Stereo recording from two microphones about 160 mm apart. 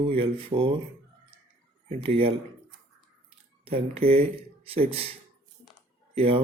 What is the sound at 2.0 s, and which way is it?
Mantra, 35° right (ahead or behind).